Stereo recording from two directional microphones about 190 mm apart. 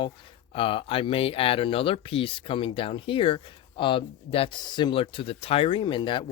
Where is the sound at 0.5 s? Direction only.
30° left (ahead or behind).